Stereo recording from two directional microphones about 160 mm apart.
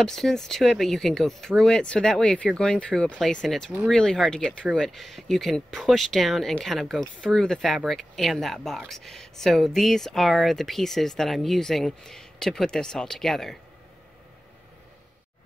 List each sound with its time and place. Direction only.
0.0 s speech: centre (ahead or behind)